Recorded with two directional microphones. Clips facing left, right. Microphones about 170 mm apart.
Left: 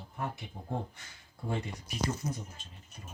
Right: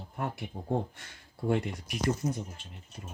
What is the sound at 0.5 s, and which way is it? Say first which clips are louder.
Speech: right 5 dB; 35° right (ahead or behind).